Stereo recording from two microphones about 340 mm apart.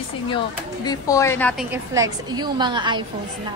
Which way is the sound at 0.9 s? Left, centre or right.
Centre.